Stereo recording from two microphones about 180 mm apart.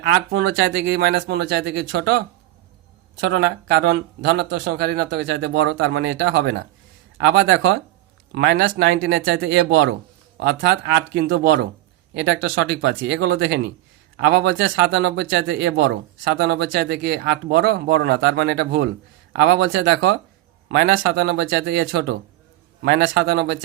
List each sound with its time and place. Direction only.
0.6 s speech: 75° right (ahead or behind)
3.2 s speech: 65° right (ahead or behind); by 9.9 s 90° right
10.4 s speech: 65° right (ahead or behind)
12.1 s speech: 75° right (ahead or behind)
22.8 s speech: 75° right (ahead or behind)